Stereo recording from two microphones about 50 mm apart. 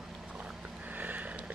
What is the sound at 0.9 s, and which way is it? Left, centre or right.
Sniff, right.